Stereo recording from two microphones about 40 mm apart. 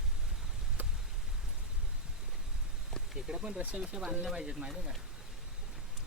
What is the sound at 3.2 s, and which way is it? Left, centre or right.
Speech, centre.